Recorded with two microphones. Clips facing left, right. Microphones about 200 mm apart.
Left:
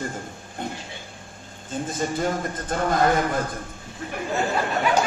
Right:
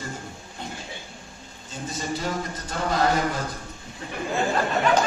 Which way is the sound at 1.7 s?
50° left (ahead or behind).